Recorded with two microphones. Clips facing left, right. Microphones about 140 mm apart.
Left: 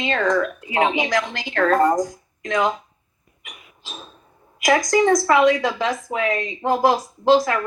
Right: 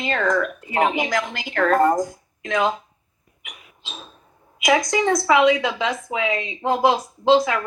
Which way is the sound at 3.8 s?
Centre (ahead or behind).